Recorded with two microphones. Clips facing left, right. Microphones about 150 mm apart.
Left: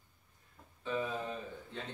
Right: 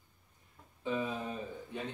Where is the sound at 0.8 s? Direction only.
15° right (ahead or behind).